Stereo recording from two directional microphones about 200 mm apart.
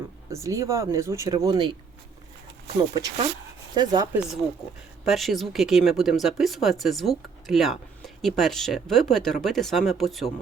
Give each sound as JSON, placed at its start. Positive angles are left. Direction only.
{"t": 0.3, "sound": "speech", "side_deg": -15}
{"t": 2.9, "sound": "speech", "side_deg": -20}
{"t": 5.0, "sound": "speech", "side_deg": 0}